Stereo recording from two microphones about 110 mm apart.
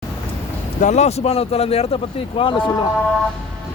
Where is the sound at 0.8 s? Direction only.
90° left; by 2.7 s 50° left (ahead or behind).